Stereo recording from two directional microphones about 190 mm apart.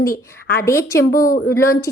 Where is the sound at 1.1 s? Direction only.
45° left (ahead or behind).